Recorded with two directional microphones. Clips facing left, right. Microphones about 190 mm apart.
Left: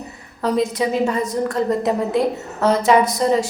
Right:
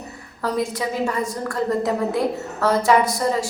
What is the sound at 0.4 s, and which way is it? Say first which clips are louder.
A woman's voice: left 4 dB; 20° left (ahead or behind).